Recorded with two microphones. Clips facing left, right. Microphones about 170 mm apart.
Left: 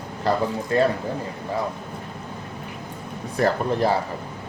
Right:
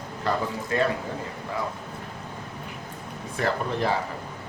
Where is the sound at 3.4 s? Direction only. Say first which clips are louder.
Left 5 dB; 40° left (ahead or behind).